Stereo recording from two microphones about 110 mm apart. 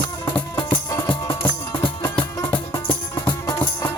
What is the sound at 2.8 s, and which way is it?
Music, 20° left (ahead or behind).